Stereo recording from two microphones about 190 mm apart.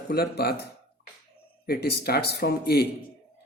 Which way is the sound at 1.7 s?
55° left (ahead or behind).